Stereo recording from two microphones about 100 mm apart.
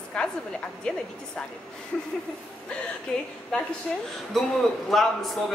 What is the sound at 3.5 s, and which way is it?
Speech, 5° left (ahead or behind).